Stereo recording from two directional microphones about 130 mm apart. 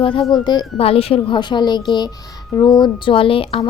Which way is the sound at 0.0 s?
45° left (ahead or behind).